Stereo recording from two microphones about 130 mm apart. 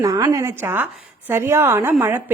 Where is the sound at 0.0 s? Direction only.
25° right (ahead or behind).